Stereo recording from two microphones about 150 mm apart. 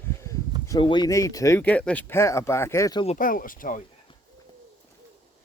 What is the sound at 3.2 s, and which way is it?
Speech, 65° left (ahead or behind).